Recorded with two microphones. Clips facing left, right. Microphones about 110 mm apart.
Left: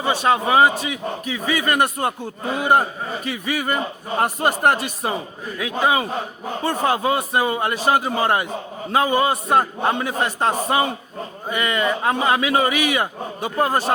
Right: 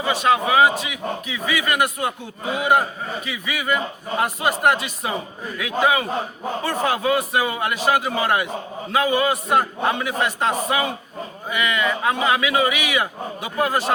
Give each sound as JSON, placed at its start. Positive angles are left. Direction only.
{"t": 0.0, "sound": "a man's voice", "side_deg": 30}
{"t": 5.5, "sound": "a man's voice", "side_deg": 30}